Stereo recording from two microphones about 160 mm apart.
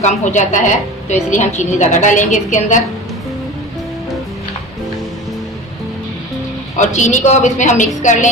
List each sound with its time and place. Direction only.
0.0 s a woman's voice: 50° left (ahead or behind)
6.8 s a woman's voice: 45° left (ahead or behind)